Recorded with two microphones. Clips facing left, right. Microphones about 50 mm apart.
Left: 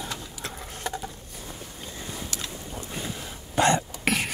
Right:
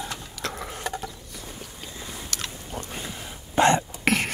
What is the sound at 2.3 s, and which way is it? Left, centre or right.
Boat, right.